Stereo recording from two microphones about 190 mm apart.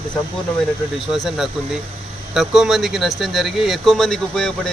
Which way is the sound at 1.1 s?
Centre (ahead or behind).